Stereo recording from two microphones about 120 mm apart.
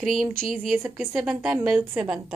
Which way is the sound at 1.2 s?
5° right (ahead or behind).